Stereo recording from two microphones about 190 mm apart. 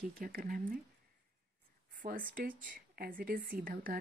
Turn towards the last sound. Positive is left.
turn(degrees=-50)  # may be behind; listen again after turning